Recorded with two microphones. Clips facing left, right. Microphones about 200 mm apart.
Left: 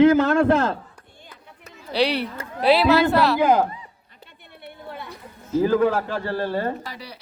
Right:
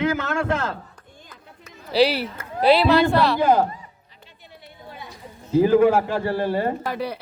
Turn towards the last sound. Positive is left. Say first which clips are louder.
# right 10 dB
turn(degrees=-55)  # may be behind; listen again after turning